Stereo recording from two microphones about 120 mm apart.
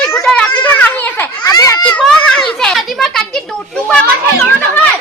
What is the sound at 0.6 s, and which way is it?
Children playing, 15° left (ahead or behind).